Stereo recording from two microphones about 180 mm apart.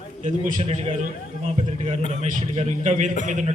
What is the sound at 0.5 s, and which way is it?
A man's voice, 35° right (ahead or behind).